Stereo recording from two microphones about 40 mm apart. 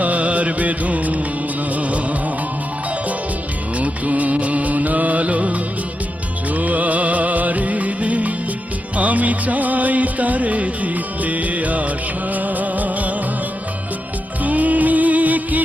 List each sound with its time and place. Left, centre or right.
0.0 s music: right
3.8 s music: right
14.4 s music: right